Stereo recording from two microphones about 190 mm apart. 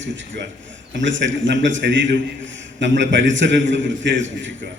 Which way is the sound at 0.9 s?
75° right (ahead or behind).